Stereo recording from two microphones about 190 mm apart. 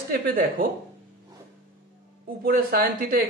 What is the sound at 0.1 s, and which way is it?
Speech, 50° right (ahead or behind).